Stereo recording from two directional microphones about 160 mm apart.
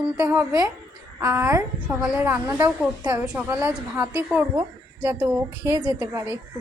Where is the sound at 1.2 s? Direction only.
20° right (ahead or behind).